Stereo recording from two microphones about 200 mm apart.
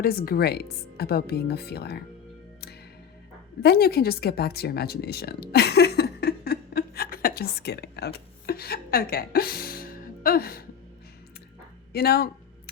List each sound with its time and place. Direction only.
0.0 s speech: 50° left (ahead or behind)
3.6 s speech: 50° left (ahead or behind)
11.9 s speech: 50° left (ahead or behind)